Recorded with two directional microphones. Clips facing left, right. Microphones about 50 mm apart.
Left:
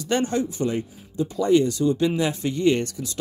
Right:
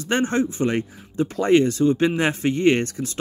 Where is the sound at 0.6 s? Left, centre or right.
Right.